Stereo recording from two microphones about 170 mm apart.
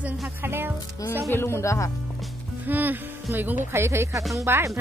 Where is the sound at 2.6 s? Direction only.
10° right (ahead or behind).